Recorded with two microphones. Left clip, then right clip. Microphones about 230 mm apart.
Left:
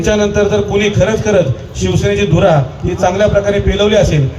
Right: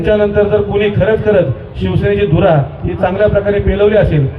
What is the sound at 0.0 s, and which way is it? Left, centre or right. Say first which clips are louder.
A man's voice: right 1 dB; left.